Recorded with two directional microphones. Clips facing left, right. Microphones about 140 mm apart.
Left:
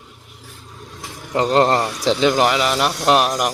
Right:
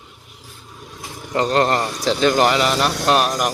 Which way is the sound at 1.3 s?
20° left (ahead or behind).